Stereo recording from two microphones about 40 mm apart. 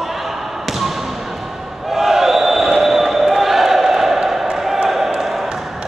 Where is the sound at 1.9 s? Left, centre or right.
Centre.